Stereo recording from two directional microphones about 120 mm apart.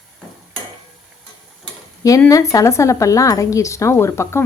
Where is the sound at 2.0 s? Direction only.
25° left (ahead or behind).